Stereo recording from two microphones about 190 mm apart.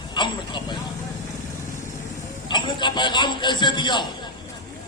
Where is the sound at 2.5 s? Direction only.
25° left (ahead or behind).